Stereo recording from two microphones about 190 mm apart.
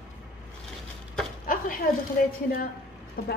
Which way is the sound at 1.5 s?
45° left (ahead or behind).